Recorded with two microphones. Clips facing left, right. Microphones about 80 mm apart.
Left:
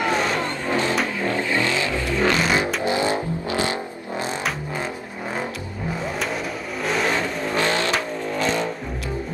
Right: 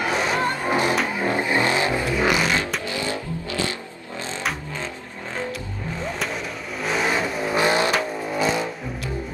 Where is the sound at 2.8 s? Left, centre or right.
Left.